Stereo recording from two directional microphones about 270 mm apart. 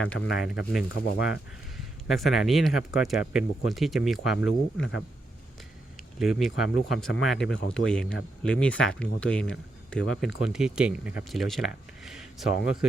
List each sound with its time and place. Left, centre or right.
0.3 s speech: left
0.5 s speech: centre
6.0 s speech: centre